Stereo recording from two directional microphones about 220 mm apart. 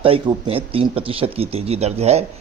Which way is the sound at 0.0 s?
25° right (ahead or behind).